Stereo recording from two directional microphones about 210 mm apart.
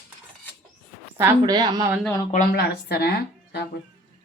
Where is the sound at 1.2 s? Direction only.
15° right (ahead or behind).